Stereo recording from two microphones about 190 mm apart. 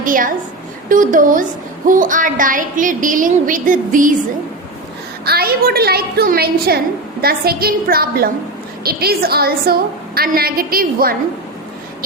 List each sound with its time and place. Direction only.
0.0 s a woman's voice: 45° right (ahead or behind)
5.2 s a woman's voice: 55° right (ahead or behind)